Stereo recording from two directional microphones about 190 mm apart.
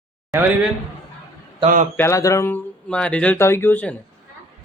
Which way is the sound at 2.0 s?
15° left (ahead or behind).